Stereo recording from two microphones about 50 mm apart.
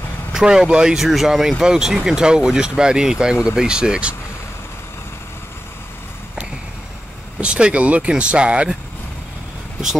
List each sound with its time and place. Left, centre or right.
0.3 s speech: centre
0.9 s speech: centre
7.3 s speech: right